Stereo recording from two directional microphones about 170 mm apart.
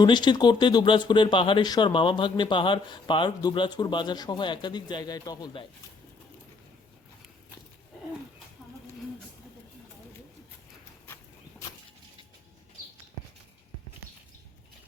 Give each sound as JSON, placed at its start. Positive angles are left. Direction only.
{"t": 0.0, "sound": "speech", "side_deg": 25}